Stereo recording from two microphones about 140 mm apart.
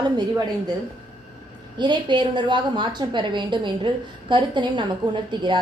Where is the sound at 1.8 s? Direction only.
35° right (ahead or behind).